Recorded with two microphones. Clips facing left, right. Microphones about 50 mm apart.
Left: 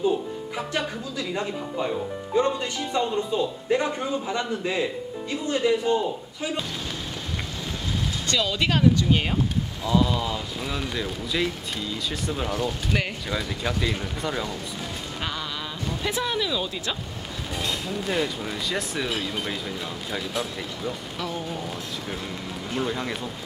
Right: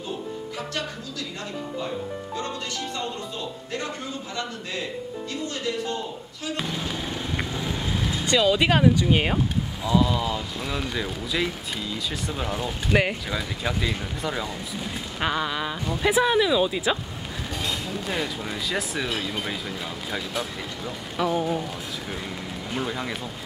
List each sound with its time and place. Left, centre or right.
1.8 s speech: centre
8.3 s speech: centre
9.8 s speech: centre
12.5 s speech: centre
13.3 s speech: centre
15.9 s speech: centre
17.6 s speech: centre
21.2 s speech: centre
22.7 s speech: centre